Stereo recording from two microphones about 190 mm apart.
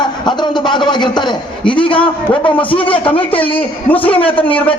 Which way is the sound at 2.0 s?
5° left (ahead or behind).